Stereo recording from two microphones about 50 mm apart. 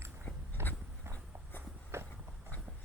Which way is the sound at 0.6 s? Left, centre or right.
Right.